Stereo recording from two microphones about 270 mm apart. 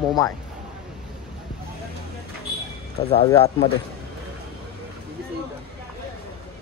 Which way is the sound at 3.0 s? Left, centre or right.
Centre.